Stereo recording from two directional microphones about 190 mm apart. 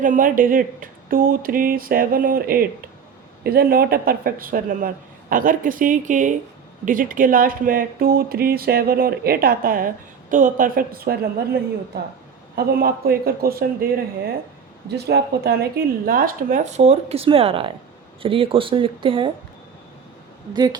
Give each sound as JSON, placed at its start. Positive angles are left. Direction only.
{"t": 0.0, "sound": "speech", "side_deg": -45}
{"t": 14.8, "sound": "speech", "side_deg": -60}
{"t": 16.0, "sound": "speech", "side_deg": -45}
{"t": 20.5, "sound": "speech", "side_deg": -20}